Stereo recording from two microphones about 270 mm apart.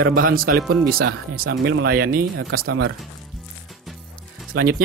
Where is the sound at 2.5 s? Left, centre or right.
Right.